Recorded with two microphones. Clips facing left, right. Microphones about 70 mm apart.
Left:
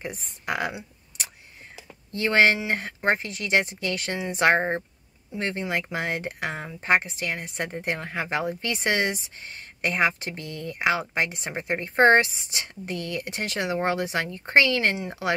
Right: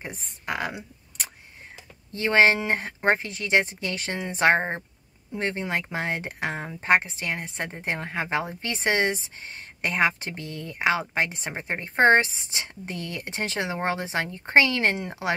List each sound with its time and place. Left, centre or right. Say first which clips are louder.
0.5 s speech: left 1 dB; centre
2.1 s speech: right 1 dB; right
4.6 s speech: left 2 dB; centre
5.4 s speech: even; right
10.5 s speech: left 2 dB; left
11.0 s speech: even; right